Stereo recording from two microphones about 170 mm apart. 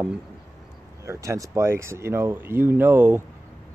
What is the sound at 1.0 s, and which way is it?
Speech, 15° right (ahead or behind).